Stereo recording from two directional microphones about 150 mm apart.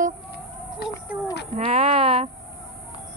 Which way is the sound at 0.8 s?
90° left.